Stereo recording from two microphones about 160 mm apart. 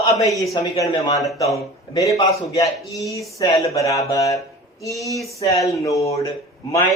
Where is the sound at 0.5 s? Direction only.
25° left (ahead or behind).